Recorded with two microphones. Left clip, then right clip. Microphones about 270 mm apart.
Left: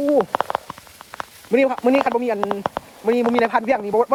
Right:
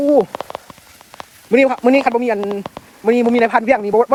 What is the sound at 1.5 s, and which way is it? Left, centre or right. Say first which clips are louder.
Speech: right 5 dB; right.